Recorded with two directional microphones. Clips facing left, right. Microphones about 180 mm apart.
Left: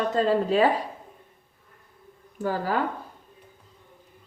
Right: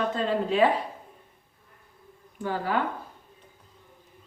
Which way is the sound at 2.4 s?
40° left (ahead or behind).